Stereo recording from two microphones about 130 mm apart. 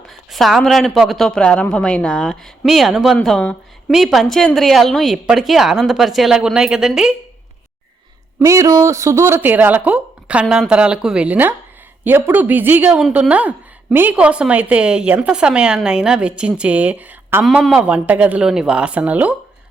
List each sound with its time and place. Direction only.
0.3 s a woman's voice: centre (ahead or behind)
8.4 s a woman's voice: 25° right (ahead or behind)